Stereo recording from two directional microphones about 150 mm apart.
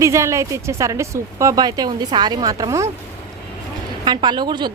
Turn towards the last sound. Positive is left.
turn(degrees=-30)  # may be behind; listen again after turning